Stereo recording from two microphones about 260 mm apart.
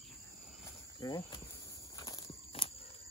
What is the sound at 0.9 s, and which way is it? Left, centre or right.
Cricket, centre.